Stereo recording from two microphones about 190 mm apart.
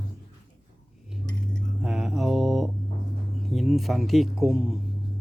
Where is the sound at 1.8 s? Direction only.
5° right (ahead or behind).